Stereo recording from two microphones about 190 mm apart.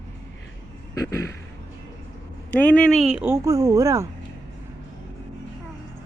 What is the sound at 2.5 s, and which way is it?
Speech, 5° left (ahead or behind).